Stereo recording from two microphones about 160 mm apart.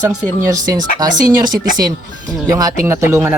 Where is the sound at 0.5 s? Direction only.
25° right (ahead or behind).